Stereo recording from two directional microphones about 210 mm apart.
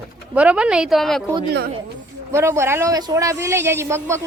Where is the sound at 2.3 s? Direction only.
15° right (ahead or behind).